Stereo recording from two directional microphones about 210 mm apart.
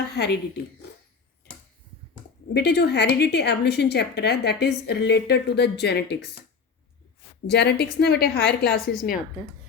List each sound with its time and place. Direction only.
0.1 s speech: 50° left (ahead or behind)
2.5 s a woman's voice: 50° left (ahead or behind)
7.4 s a woman's voice: 50° left (ahead or behind)